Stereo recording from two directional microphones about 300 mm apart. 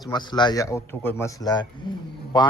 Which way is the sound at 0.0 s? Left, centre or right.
Centre.